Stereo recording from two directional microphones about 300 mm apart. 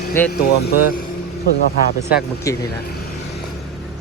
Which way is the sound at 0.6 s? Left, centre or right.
Left.